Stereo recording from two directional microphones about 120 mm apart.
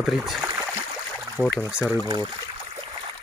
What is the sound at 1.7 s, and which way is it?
Speech, 10° right (ahead or behind).